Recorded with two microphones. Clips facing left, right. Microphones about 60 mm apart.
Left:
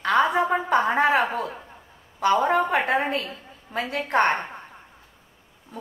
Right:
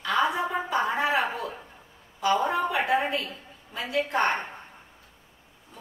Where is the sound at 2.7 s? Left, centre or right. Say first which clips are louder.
Left 2 dB; left.